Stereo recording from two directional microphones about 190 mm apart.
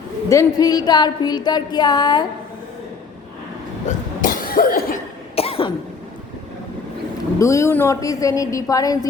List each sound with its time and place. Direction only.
0.3 s a woman's voice: 20° left (ahead or behind)
3.8 s cough: 45° left (ahead or behind)
5.4 s cough: 30° left (ahead or behind)
7.3 s a woman's voice: 15° left (ahead or behind)